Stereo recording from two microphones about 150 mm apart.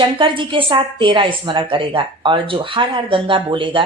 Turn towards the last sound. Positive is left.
turn(degrees=-35)  # may be behind; listen again after turning